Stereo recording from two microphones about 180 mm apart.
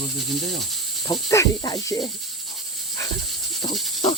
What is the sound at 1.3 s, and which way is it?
Speech, 20° left (ahead or behind).